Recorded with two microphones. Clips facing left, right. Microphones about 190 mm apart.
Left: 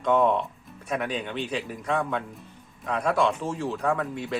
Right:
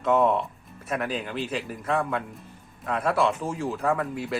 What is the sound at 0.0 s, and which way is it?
Speech, 5° right (ahead or behind).